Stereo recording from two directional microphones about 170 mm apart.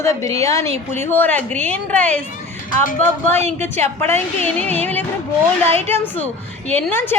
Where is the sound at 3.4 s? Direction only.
40° right (ahead or behind).